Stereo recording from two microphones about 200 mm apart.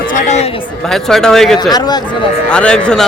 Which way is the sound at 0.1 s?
35° left (ahead or behind).